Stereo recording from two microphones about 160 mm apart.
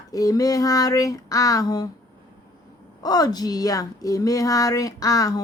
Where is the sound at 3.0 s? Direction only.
25° left (ahead or behind).